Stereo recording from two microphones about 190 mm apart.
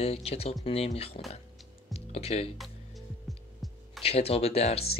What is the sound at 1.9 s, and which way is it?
Music, 35° left (ahead or behind).